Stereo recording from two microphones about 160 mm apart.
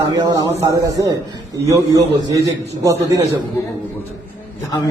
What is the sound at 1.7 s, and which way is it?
A man's voice, 20° right (ahead or behind).